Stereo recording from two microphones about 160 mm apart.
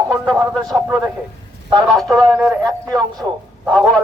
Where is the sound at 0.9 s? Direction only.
5° right (ahead or behind).